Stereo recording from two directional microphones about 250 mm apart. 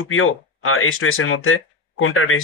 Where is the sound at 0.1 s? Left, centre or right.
Left.